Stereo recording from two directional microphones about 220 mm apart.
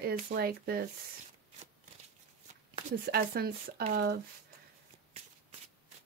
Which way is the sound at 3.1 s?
45° right (ahead or behind).